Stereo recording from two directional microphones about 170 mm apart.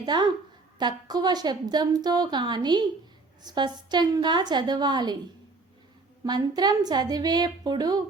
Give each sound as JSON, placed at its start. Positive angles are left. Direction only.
{"t": 0.0, "sound": "a woman's voice", "side_deg": -25}
{"t": 6.2, "sound": "a woman's voice", "side_deg": -25}